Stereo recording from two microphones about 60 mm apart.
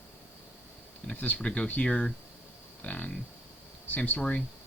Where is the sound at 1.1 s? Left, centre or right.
Left.